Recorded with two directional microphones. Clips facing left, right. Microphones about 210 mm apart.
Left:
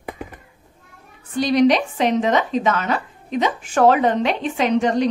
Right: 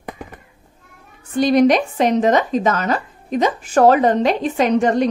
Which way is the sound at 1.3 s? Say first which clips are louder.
Right 2 dB; 50° right (ahead or behind).